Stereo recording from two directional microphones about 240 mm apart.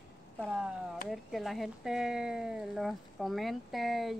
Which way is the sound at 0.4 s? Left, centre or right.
Centre.